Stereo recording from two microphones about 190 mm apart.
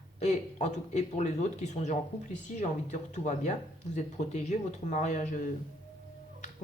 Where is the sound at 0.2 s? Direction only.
40° left (ahead or behind).